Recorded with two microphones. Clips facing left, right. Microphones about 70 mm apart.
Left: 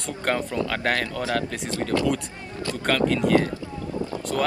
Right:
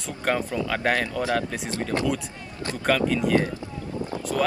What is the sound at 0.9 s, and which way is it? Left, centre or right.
Speech, centre.